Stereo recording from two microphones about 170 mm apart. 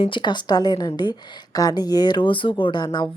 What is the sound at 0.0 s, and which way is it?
Speech, 30° left (ahead or behind).